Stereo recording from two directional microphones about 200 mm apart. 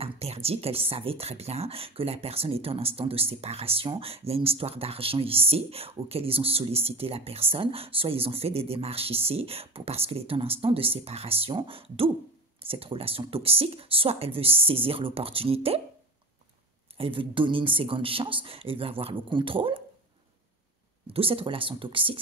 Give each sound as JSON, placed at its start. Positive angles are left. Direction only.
{"t": 0.0, "sound": "speech", "side_deg": -30}
{"t": 16.9, "sound": "speech", "side_deg": -25}
{"t": 21.1, "sound": "speech", "side_deg": -25}